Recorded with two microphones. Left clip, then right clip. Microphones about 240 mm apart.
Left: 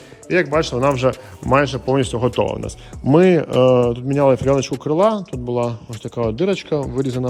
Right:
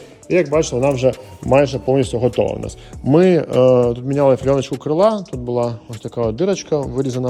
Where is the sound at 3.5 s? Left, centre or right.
Left.